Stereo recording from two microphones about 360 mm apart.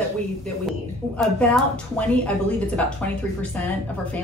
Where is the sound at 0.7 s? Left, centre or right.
Centre.